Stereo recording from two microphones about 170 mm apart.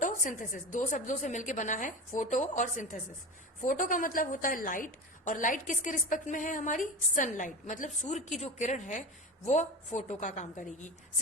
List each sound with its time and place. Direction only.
0.0 s a woman's voice: 50° left (ahead or behind)